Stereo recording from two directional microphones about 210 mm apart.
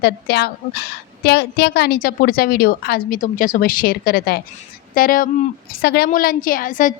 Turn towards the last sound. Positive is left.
turn(degrees=40)  # may be behind; listen again after turning